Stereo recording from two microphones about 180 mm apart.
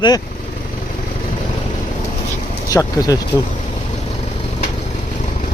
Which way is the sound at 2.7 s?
20° left (ahead or behind).